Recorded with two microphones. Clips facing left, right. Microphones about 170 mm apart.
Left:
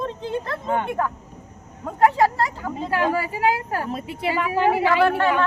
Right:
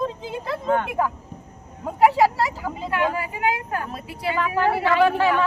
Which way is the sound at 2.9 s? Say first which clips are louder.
Left 2 dB; 35° left (ahead or behind).